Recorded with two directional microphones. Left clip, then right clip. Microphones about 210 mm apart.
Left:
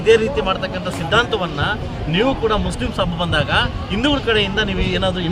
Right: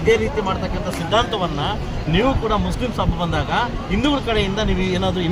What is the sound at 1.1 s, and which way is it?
Speech, 5° left (ahead or behind).